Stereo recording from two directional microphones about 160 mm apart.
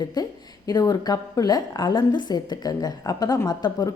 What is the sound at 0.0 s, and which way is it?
A woman's voice, 25° left (ahead or behind).